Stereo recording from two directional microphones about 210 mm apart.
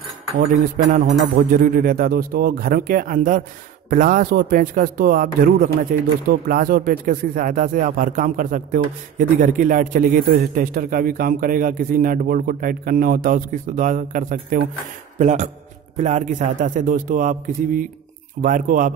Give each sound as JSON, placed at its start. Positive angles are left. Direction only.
{"t": 0.8, "sound": "speech", "side_deg": -35}